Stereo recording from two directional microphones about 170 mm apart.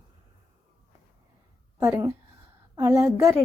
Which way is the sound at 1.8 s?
15° right (ahead or behind).